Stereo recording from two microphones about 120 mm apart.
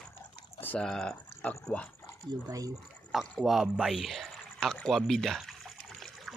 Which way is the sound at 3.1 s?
Centre (ahead or behind).